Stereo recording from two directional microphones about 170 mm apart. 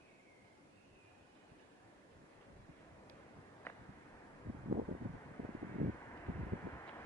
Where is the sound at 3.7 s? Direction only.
10° left (ahead or behind).